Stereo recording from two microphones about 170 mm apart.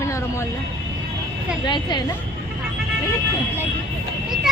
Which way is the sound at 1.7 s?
25° left (ahead or behind).